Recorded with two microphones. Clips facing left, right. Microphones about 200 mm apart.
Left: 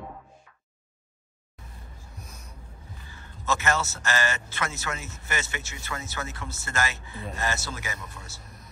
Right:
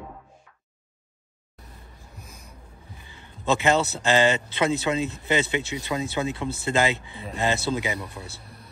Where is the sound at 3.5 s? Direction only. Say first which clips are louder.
Right 6 dB; 15° right (ahead or behind).